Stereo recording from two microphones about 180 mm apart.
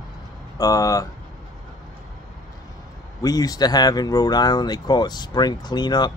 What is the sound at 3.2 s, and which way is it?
Speech, 20° left (ahead or behind).